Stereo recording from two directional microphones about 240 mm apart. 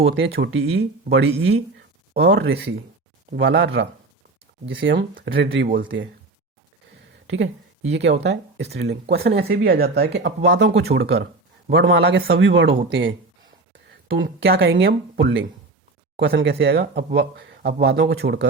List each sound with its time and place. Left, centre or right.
0.1 s speech: right
7.3 s speech: right
14.3 s speech: right